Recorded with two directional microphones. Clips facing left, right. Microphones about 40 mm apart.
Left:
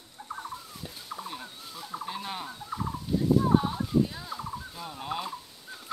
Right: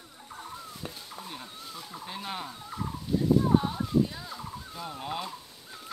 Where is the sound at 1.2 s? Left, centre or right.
Centre.